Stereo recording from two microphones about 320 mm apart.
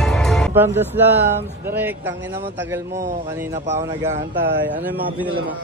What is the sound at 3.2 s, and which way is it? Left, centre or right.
A man's voice, centre.